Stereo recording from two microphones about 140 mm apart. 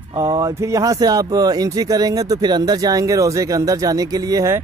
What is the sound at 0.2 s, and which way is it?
Speech, 25° right (ahead or behind).